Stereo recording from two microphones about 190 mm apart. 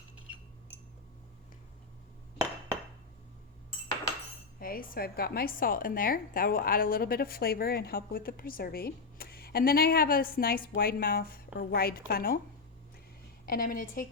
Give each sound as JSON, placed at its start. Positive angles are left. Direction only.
{"t": 4.6, "sound": "a woman's voice", "side_deg": 50}
{"t": 13.4, "sound": "a woman's voice", "side_deg": 50}